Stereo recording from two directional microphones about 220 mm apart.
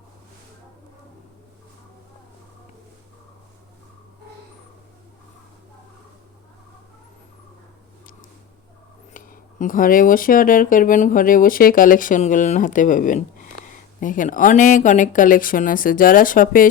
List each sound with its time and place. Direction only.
9.1 s speech: 35° left (ahead or behind)